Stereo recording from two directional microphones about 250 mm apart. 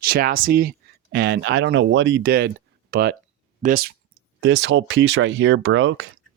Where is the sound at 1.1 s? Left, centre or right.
Right.